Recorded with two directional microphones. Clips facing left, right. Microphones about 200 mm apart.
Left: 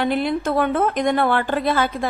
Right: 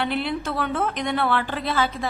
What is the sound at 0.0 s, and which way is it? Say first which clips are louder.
A woman's voice: left 5 dB; 45° left (ahead or behind).